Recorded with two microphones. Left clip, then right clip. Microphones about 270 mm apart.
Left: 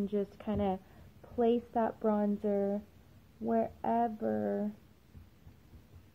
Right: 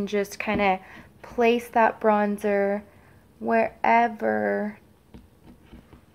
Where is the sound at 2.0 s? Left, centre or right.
Centre.